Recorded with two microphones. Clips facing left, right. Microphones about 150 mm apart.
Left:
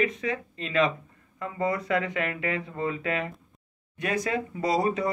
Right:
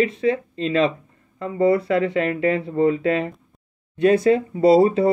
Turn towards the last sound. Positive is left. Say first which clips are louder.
# right 11 dB
turn(degrees=-30)  # may be behind; listen again after turning